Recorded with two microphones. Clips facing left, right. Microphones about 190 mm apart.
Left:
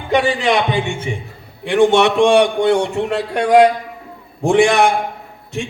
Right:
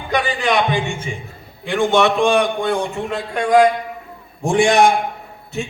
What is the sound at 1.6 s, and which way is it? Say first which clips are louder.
A man's voice: left 3 dB; 75° left (ahead or behind).